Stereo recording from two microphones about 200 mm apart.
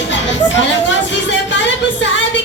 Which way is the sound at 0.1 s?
65° left (ahead or behind).